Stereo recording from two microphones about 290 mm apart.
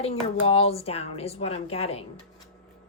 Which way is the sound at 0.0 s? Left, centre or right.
Centre.